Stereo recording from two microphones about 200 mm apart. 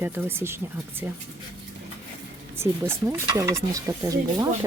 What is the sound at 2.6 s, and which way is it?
Speech, 10° right (ahead or behind).